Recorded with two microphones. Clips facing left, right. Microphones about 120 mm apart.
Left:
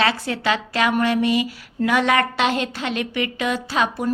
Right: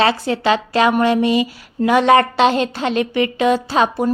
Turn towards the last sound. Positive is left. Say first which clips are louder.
# right 5 dB
turn(degrees=-30)  # may be behind; listen again after turning